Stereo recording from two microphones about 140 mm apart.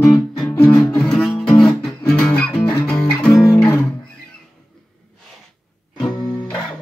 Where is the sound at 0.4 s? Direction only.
10° left (ahead or behind).